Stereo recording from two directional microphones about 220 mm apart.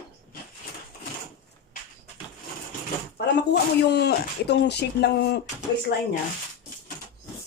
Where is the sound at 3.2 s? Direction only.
50° left (ahead or behind).